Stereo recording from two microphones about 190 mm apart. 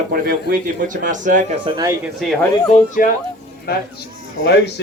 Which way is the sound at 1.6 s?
20° right (ahead or behind).